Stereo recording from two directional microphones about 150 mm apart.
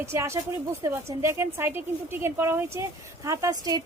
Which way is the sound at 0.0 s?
20° right (ahead or behind).